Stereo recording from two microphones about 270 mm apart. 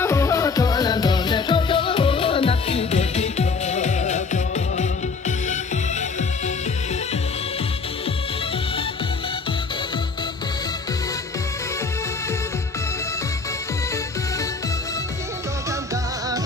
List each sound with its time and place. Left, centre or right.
0.0 s music: centre